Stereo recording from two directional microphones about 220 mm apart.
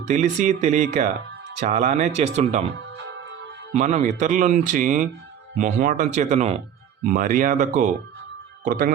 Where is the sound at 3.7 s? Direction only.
30° right (ahead or behind).